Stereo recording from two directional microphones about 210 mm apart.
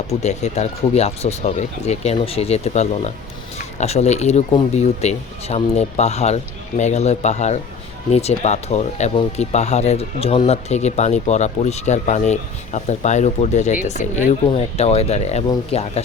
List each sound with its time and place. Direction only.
0.1 s speech: 30° left (ahead or behind)